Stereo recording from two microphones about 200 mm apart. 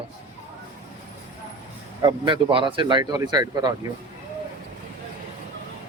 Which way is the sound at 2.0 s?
20° right (ahead or behind).